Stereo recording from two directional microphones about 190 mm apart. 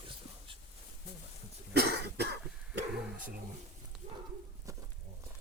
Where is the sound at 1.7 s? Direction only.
55° right (ahead or behind).